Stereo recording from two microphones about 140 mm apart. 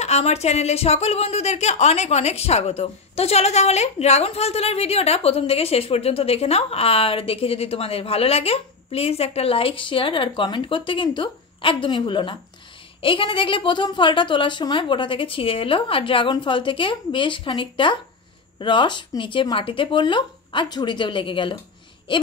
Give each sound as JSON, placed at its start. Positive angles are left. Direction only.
{"t": 0.0, "sound": "a woman's voice", "side_deg": 50}